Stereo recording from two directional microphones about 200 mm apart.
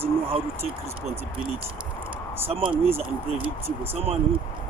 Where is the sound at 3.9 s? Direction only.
30° right (ahead or behind).